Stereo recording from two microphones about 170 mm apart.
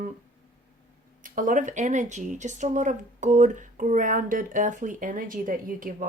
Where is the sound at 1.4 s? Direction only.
50° right (ahead or behind).